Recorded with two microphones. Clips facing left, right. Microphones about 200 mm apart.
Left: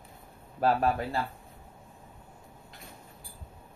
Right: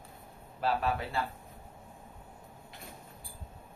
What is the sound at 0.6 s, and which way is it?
Speech, 45° left (ahead or behind).